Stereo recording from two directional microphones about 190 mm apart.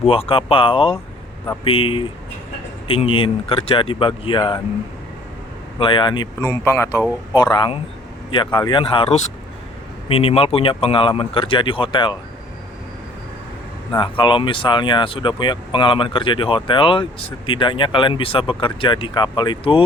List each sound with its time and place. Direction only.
0.0 s speech: 30° left (ahead or behind)
5.8 s speech: 25° left (ahead or behind)
13.9 s speech: 25° left (ahead or behind)